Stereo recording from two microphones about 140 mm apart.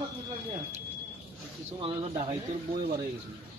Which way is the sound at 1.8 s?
40° right (ahead or behind).